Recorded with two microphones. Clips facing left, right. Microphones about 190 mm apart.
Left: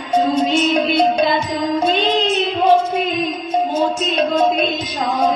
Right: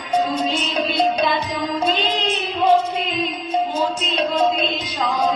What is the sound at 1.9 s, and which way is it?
Music, 25° left (ahead or behind).